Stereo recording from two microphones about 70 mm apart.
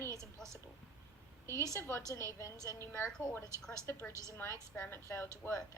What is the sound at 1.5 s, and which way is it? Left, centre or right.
Speech, right.